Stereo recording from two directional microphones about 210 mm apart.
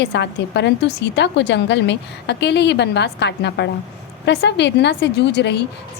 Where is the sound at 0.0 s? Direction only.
55° left (ahead or behind).